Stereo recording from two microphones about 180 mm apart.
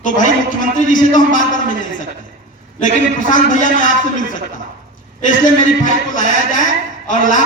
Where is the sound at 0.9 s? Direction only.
45° left (ahead or behind).